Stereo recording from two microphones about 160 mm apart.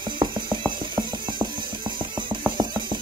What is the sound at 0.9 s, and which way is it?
Mechanisms, 30° right (ahead or behind).